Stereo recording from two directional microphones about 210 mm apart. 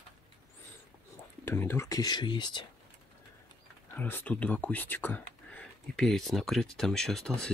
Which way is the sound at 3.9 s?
10° left (ahead or behind).